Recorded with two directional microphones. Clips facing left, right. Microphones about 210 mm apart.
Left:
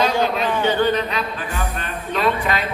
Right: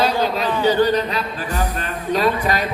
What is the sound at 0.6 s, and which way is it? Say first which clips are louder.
Speech: right 4 dB; 35° right (ahead or behind).